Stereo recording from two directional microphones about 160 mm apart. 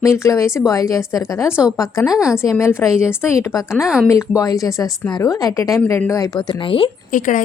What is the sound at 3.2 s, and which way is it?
A woman's voice, 20° left (ahead or behind).